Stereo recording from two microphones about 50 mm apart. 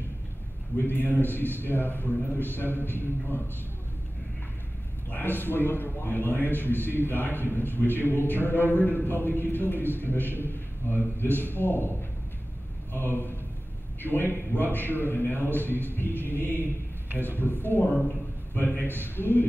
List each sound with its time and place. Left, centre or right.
0.7 s a man's voice: left
5.1 s a man's voice: left
18.9 s a man's voice: left